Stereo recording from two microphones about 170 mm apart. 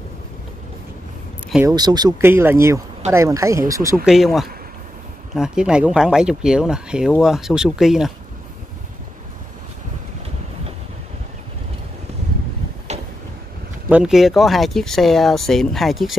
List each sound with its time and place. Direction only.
1.7 s speech: 25° right (ahead or behind)
4.0 s speech: centre (ahead or behind)
13.8 s speech: 5° right (ahead or behind)